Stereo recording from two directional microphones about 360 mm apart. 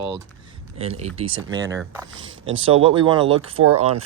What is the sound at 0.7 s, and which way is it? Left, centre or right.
Speech, centre.